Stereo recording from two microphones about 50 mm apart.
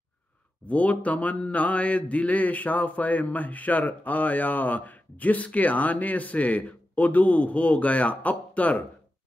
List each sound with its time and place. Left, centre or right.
0.7 s mantra: left